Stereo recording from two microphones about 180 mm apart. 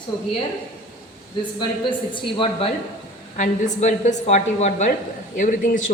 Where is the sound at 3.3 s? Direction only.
40° left (ahead or behind).